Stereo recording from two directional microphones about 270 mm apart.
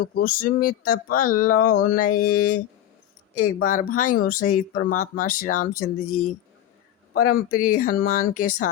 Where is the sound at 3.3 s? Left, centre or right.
Left.